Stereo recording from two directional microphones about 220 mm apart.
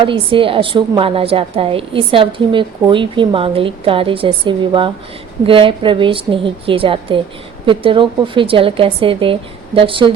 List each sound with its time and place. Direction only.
0.0 s a woman's voice: 25° right (ahead or behind)